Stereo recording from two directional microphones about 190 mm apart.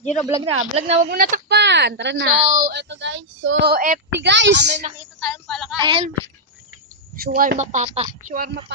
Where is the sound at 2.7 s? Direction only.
65° right (ahead or behind); by 3.5 s 85° right.